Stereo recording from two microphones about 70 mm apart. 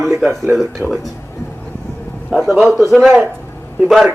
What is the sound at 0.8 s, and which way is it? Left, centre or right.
Speech, right.